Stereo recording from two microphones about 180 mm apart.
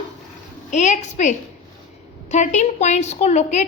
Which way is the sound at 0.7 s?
40° left (ahead or behind).